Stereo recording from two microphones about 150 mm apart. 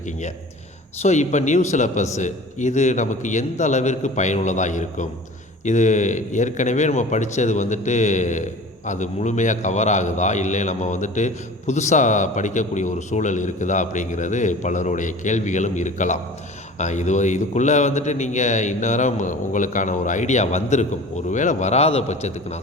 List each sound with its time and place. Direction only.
1.0 s a man's voice: 50° left (ahead or behind)